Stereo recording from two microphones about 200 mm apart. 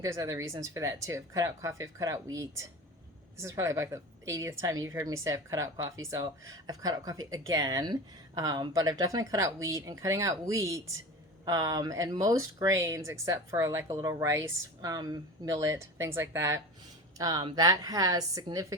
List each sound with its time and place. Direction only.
0.0 s a woman's voice: 15° right (ahead or behind)